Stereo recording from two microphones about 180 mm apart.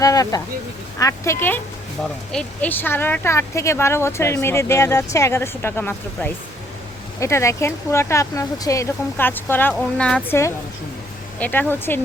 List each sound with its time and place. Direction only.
0.0 s speech: 20° left (ahead or behind)
11.3 s speech: 10° left (ahead or behind)